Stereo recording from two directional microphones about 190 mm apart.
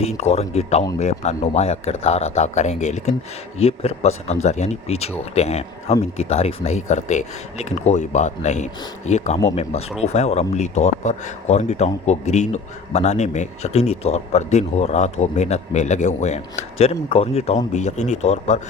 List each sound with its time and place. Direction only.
0.0 s speech: 35° left (ahead or behind)